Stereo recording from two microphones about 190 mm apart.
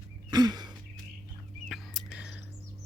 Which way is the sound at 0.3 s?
20° right (ahead or behind).